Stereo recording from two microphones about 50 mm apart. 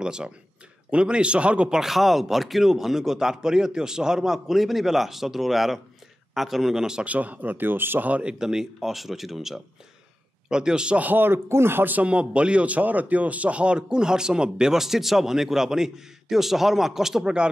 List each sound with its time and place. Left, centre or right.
0.0 s speech: centre
1.8 s speech: centre
7.1 s speech: right
8.1 s speech: right
8.4 s speech: centre
11.0 s speech: right
11.4 s speech: right
12.0 s speech: right